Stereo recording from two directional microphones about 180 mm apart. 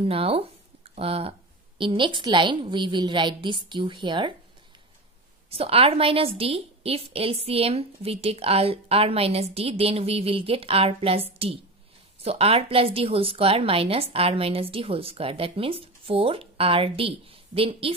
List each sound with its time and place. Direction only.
0.0 s a woman's voice: 30° right (ahead or behind)
5.5 s a woman's voice: 30° right (ahead or behind)